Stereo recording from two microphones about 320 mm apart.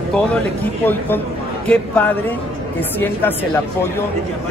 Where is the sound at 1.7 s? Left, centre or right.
Centre.